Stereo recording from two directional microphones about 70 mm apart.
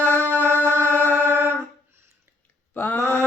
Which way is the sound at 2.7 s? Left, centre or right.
Left.